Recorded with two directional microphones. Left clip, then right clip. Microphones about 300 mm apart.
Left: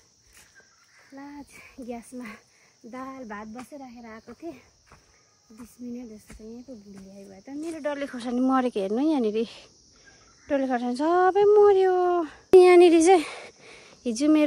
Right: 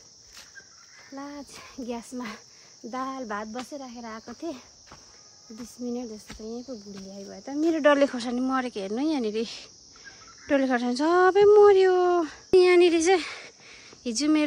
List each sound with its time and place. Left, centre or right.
1.1 s speech: centre
7.0 s speech: centre
7.7 s speech: right
8.0 s speech: centre
12.4 s a sound: centre